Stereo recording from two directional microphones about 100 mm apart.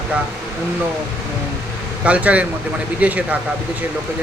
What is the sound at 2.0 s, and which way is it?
Speech, 15° right (ahead or behind).